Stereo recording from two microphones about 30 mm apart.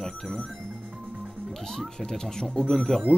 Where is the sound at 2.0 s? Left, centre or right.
Centre.